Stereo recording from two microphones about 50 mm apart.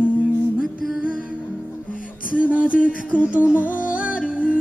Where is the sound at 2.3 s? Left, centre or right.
Right.